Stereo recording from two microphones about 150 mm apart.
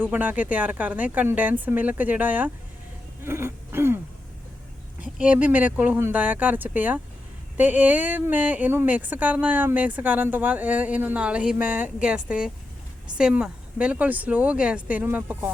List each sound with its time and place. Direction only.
0.0 s speech: 10° right (ahead or behind)
3.2 s throat clearing: 15° right (ahead or behind)
4.9 s speech: 10° right (ahead or behind)